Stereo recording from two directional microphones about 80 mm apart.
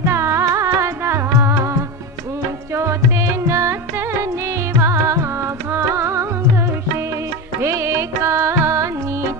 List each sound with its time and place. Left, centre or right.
0.0 s music: right
4.7 s carnatic music: right
5.7 s music: right
7.6 s music: right